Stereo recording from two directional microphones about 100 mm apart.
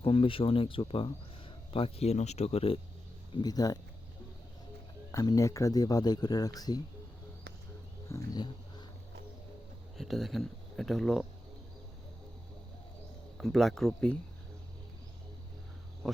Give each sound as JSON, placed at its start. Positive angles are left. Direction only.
{"t": 0.0, "sound": "speech", "side_deg": 65}
{"t": 3.3, "sound": "speech", "side_deg": 40}
{"t": 5.1, "sound": "speech", "side_deg": 35}
{"t": 8.0, "sound": "speech", "side_deg": 30}
{"t": 10.0, "sound": "speech", "side_deg": 0}
{"t": 13.4, "sound": "speech", "side_deg": 0}